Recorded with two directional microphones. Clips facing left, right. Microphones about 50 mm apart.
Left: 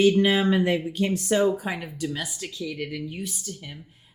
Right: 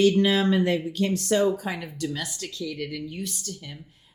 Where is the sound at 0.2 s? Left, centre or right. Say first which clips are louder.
Even; centre.